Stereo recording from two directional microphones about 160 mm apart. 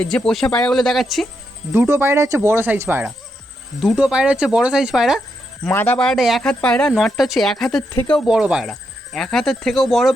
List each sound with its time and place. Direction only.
0.0 s speech: 5° left (ahead or behind)
1.7 s speech: 15° right (ahead or behind)
3.8 s speech: 5° right (ahead or behind)
5.6 s speech: 10° left (ahead or behind)
8.3 s speech: 5° right (ahead or behind)